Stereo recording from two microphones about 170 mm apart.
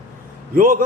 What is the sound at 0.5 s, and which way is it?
Speech, 55° right (ahead or behind).